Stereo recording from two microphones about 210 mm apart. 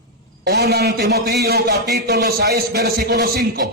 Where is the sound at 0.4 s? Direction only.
50° right (ahead or behind).